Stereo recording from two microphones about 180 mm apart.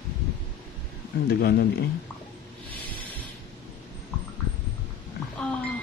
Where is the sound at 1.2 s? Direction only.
60° left (ahead or behind).